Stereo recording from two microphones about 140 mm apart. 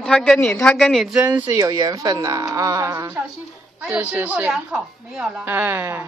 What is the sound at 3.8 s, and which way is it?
Speech, 10° right (ahead or behind).